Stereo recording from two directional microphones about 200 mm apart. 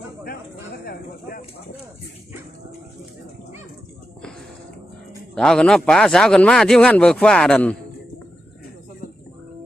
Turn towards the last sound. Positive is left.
turn(degrees=5)  # may be behind; listen again after turning